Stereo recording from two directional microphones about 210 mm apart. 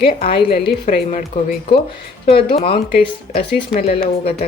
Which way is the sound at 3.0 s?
50° left (ahead or behind).